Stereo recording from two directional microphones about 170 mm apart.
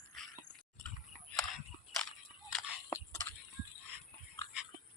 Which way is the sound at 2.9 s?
15° left (ahead or behind).